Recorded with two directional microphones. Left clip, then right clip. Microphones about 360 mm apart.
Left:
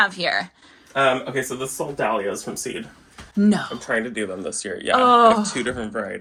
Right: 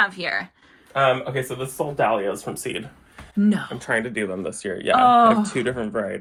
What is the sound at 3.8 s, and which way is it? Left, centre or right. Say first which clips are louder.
Speech: even; right.